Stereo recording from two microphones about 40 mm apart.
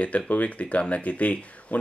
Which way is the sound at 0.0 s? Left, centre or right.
Left.